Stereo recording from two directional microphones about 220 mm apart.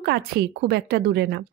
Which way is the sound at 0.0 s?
50° right (ahead or behind).